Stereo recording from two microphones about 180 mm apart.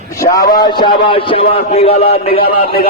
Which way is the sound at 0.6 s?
25° left (ahead or behind).